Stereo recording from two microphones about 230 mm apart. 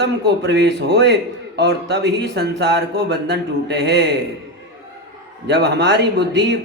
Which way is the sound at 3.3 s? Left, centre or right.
Right.